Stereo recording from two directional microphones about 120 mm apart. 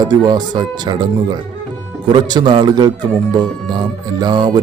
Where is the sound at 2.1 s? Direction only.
40° right (ahead or behind).